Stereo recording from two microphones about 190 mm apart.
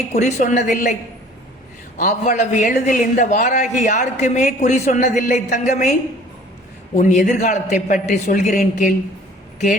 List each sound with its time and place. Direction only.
0.1 s a man's voice: 35° left (ahead or behind)
2.0 s a man's voice: 40° left (ahead or behind)